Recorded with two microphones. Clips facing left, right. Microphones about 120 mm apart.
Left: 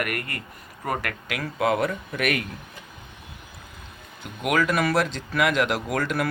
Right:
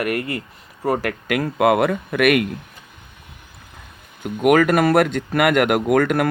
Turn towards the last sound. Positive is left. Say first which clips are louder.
# right 9 dB
turn(degrees=-55)  # may be behind; listen again after turning